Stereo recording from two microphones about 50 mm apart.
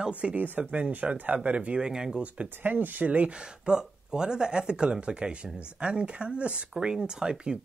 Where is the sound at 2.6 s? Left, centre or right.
Right.